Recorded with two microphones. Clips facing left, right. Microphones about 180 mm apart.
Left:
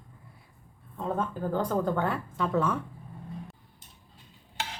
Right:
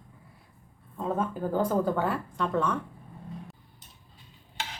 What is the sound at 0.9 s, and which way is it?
Speech, 5° right (ahead or behind).